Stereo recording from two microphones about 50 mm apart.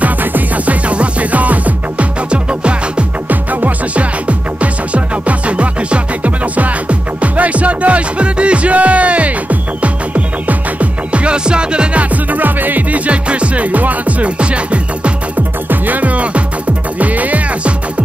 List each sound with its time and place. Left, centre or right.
0.0 s music: right
15.7 s music: right